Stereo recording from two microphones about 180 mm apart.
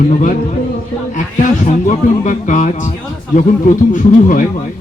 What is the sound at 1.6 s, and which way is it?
Speech, 45° left (ahead or behind).